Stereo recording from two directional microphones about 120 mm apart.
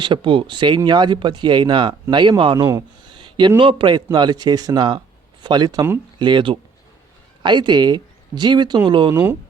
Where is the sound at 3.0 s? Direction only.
40° right (ahead or behind).